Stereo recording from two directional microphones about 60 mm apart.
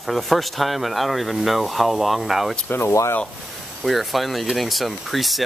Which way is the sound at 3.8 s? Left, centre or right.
Centre.